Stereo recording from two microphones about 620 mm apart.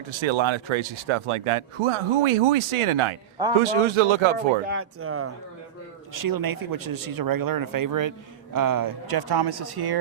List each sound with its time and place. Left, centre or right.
0.1 s speech: right
4.6 s speech: centre
6.1 s speech: right